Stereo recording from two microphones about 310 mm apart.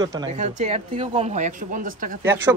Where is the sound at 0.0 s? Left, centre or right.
Centre.